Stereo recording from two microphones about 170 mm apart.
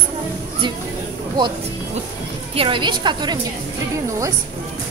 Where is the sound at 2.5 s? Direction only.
30° right (ahead or behind).